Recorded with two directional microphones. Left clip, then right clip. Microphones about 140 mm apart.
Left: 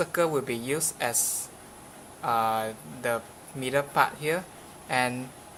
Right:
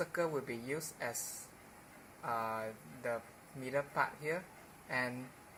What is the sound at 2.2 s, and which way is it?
Speech, 45° left (ahead or behind).